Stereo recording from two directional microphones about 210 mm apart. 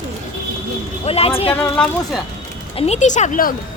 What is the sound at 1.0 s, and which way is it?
Speech, 30° left (ahead or behind).